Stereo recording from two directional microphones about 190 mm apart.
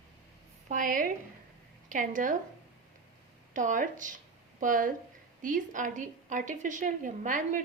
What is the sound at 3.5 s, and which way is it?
A woman's voice, 45° right (ahead or behind).